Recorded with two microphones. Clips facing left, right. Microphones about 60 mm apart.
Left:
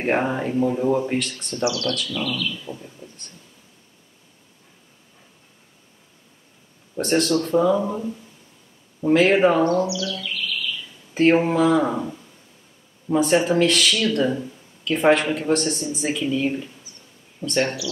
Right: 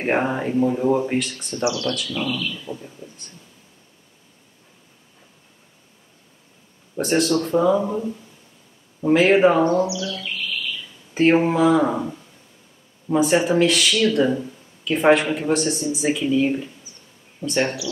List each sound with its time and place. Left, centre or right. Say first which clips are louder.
0.0 s speech: right 1 dB; centre
1.6 s speech: even; right
2.5 s speech: right 2 dB; centre
7.0 s speech: right 1 dB; centre
9.0 s speech: right 1 dB; centre
9.7 s speech: right 1 dB; right
11.1 s speech: even; centre